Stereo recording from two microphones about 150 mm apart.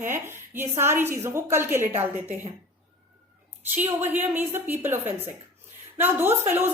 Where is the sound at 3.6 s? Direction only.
15° right (ahead or behind).